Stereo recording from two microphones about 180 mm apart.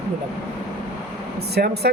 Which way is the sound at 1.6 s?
60° right (ahead or behind).